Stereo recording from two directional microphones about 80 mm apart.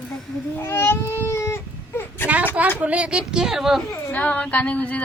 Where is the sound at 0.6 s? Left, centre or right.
Left.